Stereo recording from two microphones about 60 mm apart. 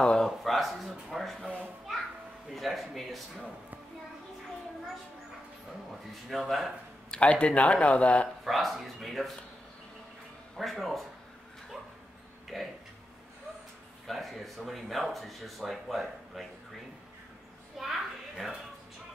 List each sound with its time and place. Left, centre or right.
0.0 s speech: centre
0.4 s speech: centre
1.4 s speech: centre
2.5 s speech: centre
6.3 s speech: centre
7.1 s speech: centre
8.5 s speech: centre
10.6 s speech: centre
12.5 s speech: centre
14.0 s speech: centre
17.7 s speech: centre